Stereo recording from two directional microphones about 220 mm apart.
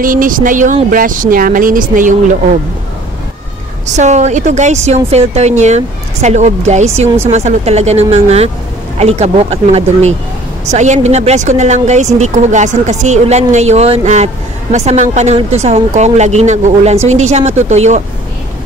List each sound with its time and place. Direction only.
0.0 s speech: 40° right (ahead or behind)
3.8 s speech: 30° right (ahead or behind)